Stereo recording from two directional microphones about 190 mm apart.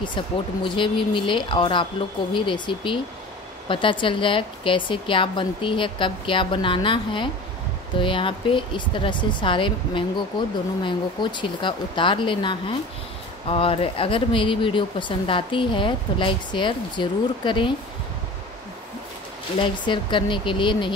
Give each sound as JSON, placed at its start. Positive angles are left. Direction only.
{"t": 0.7, "sound": "speech", "side_deg": 25}
{"t": 19.6, "sound": "speech", "side_deg": 25}